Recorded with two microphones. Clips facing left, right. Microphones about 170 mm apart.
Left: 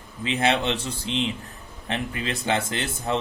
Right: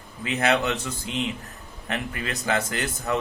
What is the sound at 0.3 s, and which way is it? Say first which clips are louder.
Speech: even; 25° left (ahead or behind).